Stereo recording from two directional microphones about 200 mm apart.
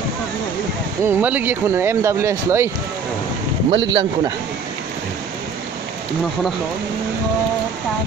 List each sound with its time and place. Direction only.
1.0 s speech: 10° right (ahead or behind)
3.7 s speech: 25° right (ahead or behind)